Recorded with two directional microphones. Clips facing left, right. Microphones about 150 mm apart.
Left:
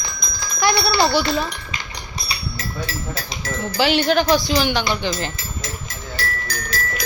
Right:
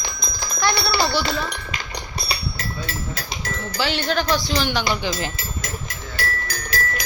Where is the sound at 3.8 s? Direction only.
15° left (ahead or behind); by 5.3 s 5° right (ahead or behind).